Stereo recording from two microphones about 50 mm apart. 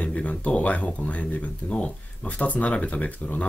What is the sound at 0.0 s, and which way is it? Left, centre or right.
Speech, left.